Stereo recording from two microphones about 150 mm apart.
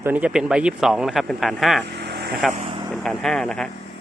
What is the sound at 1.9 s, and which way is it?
Vehicle, 90° right.